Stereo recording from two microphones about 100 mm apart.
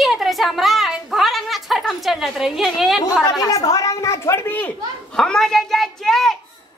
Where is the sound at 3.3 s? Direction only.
35° left (ahead or behind); by 4.7 s 20° left (ahead or behind).